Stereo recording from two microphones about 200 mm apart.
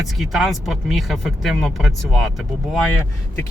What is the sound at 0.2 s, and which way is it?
Speech, centre (ahead or behind).